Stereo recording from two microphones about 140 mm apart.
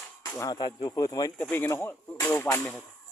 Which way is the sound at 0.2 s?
25° left (ahead or behind).